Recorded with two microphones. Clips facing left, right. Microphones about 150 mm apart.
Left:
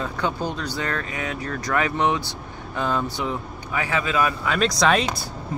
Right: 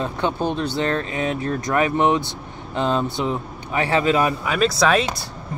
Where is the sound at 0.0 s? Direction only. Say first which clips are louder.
Right 3 dB; 20° right (ahead or behind).